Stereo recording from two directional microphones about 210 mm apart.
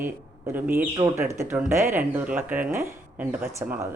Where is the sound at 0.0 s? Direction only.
10° right (ahead or behind).